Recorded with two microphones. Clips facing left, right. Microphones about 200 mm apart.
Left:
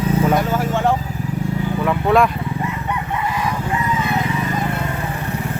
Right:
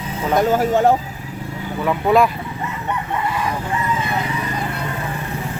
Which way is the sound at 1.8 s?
Centre (ahead or behind).